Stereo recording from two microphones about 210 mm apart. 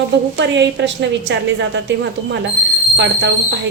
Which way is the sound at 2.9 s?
55° right (ahead or behind).